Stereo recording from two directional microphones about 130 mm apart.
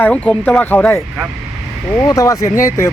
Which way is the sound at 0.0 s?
10° left (ahead or behind).